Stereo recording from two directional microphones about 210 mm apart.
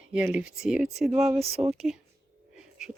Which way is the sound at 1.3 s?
30° right (ahead or behind).